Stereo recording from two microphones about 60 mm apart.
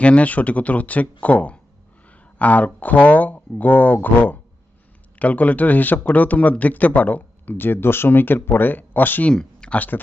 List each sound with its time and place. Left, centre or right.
0.0 s speech: left
9.3 s a sound: centre
9.7 s speech: left